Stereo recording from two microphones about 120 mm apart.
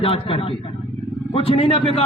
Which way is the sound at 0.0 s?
50° left (ahead or behind).